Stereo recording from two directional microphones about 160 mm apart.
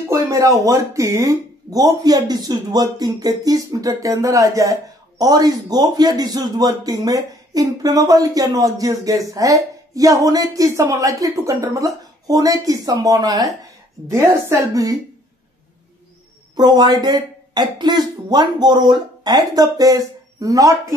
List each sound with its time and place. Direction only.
0.1 s a man's voice: 20° right (ahead or behind)
16.5 s a man's voice: 25° right (ahead or behind)